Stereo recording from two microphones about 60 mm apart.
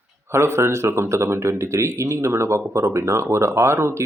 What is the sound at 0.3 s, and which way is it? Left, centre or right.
A man's voice, right.